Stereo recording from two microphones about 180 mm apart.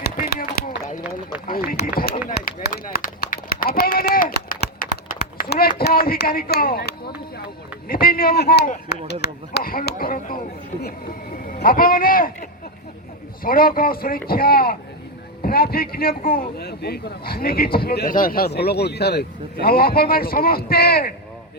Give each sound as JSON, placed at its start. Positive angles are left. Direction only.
{"t": 0.0, "sound": "a sound", "side_deg": 55}
{"t": 2.2, "sound": "run", "side_deg": 50}
{"t": 7.9, "sound": "a man's voice", "side_deg": 55}
{"t": 11.4, "sound": "a man's voice", "side_deg": 55}